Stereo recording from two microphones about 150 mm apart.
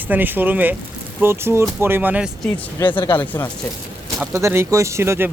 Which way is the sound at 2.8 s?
20° left (ahead or behind).